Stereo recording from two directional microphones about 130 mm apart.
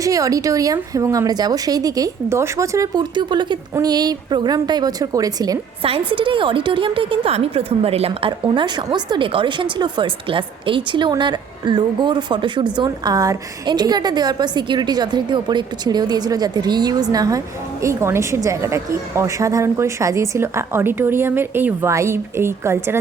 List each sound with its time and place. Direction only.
0.0 s a woman's voice: 25° right (ahead or behind)
5.8 s a woman's voice: 45° right (ahead or behind)
8.3 s a woman's voice: 35° right (ahead or behind); by 23.0 s 20° right (ahead or behind)